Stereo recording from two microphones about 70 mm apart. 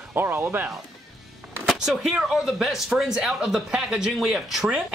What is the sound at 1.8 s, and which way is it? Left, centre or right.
Speech, centre.